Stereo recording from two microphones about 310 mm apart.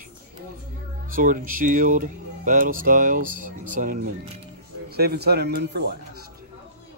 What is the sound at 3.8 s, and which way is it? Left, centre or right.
Speech, right.